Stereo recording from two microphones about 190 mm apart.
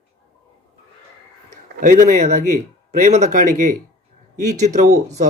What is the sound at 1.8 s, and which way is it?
A man's voice, 45° right (ahead or behind).